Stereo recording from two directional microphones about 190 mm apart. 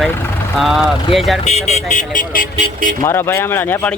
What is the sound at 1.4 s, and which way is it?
Speech, 35° left (ahead or behind).